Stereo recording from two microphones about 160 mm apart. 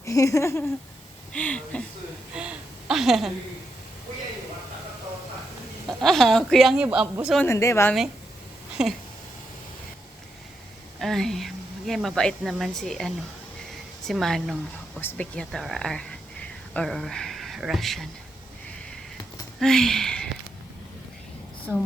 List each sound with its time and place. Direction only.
0.0 s a sound: 20° left (ahead or behind)
1.3 s speech: 10° left (ahead or behind)
2.3 s a sound: 5° right (ahead or behind)
6.0 s speech: centre (ahead or behind)
7.3 s speech: 15° left (ahead or behind)
8.8 s speech: 5° right (ahead or behind)
11.0 s a woman's voice: centre (ahead or behind)
19.5 s speech: centre (ahead or behind)